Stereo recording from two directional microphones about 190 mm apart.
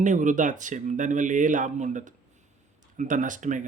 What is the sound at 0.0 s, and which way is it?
Speech, 40° right (ahead or behind).